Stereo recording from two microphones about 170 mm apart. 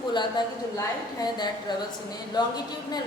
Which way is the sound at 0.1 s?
25° left (ahead or behind).